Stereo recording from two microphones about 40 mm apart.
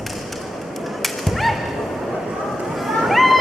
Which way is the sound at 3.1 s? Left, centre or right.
Centre.